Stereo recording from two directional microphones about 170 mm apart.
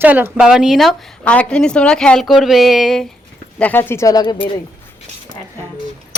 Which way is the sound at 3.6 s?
10° left (ahead or behind).